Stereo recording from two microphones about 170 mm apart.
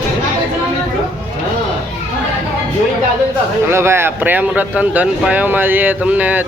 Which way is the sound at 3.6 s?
15° right (ahead or behind).